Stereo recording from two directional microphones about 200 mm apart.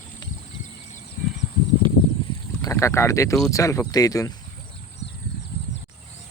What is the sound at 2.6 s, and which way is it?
Speech, 15° left (ahead or behind).